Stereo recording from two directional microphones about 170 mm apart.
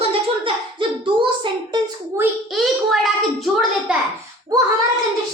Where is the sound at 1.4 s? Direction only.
25° right (ahead or behind).